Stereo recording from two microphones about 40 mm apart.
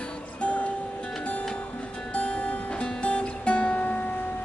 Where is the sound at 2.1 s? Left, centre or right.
Left.